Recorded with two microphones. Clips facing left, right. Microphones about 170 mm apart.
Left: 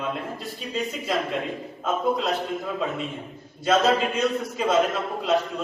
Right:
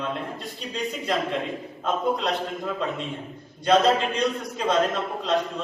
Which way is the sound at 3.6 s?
5° left (ahead or behind).